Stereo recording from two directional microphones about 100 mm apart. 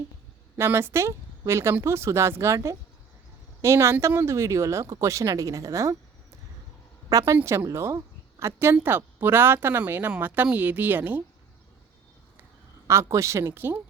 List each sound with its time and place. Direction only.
0.5 s speech: 25° right (ahead or behind)
7.1 s a woman's voice: 35° right (ahead or behind); by 11.2 s 20° right (ahead or behind)
12.9 s speech: 30° right (ahead or behind)